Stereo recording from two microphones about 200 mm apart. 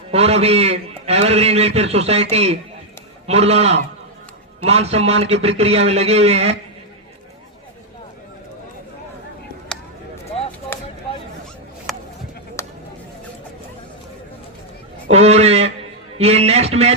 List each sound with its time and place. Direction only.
0.1 s a man's voice: 30° right (ahead or behind)
9.7 s a sound: 5° left (ahead or behind)
11.9 s bleat: centre (ahead or behind)
12.6 s a sound: 15° left (ahead or behind)
15.0 s honk: 30° right (ahead or behind)
16.1 s a man's voice: 30° right (ahead or behind)